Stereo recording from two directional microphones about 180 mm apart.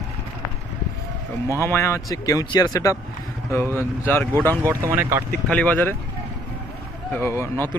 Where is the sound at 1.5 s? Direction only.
15° left (ahead or behind).